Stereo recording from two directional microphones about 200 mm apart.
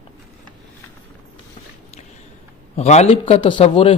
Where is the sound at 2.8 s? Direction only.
35° left (ahead or behind).